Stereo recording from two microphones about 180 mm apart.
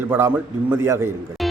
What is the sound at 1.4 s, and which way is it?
Music, centre (ahead or behind).